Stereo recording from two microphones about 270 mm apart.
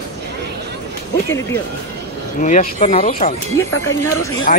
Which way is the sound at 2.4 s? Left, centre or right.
Left.